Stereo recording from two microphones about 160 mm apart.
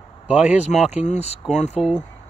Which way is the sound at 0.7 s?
45° left (ahead or behind).